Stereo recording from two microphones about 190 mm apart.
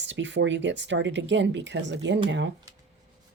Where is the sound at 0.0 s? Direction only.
70° right (ahead or behind).